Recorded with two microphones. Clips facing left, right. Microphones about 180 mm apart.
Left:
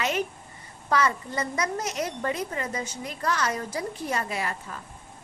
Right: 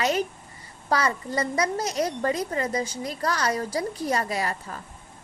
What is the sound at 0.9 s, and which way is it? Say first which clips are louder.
A woman's voice: even; 35° right (ahead or behind).